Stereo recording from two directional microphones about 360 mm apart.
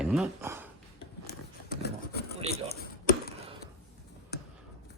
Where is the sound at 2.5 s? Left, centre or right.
Left.